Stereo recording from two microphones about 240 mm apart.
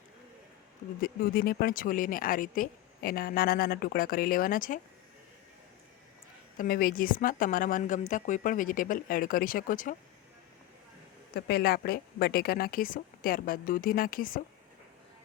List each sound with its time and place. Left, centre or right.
1.0 s speech: left
6.6 s speech: left
11.3 s speech: left